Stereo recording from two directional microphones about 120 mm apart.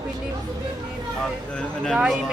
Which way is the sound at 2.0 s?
5° right (ahead or behind).